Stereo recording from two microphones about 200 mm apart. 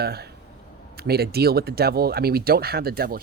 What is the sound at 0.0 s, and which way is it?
Speech, 50° right (ahead or behind).